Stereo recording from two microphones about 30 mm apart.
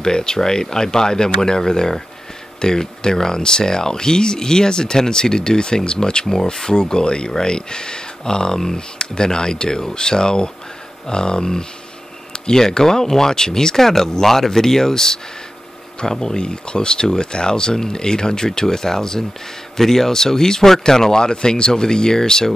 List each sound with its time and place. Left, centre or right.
0.0 s speech: left
16.3 s speech: left